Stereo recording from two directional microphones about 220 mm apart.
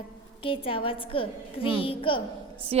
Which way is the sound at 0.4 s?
25° left (ahead or behind).